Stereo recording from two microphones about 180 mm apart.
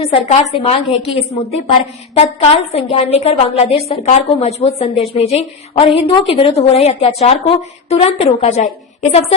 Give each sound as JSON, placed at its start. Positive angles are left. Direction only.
{"t": 0.0, "sound": "a woman's voice", "side_deg": 35}